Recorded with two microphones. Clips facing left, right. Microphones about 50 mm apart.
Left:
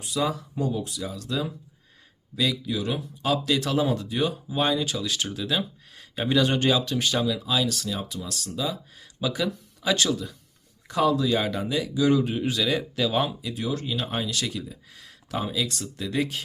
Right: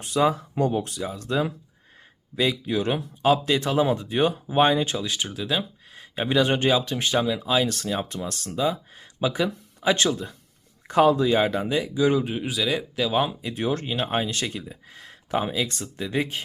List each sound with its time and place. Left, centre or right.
0.0 s speech: right
0.5 s speech: right
0.9 s speech: right
3.2 s speech: right; by 13.3 s centre
13.4 s speech: right
14.1 s speech: right